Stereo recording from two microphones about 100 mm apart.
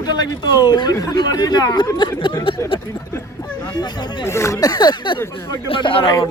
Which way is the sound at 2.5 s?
60° left (ahead or behind).